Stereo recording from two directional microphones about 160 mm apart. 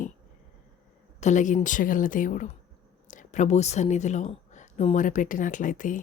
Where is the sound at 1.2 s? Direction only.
50° left (ahead or behind).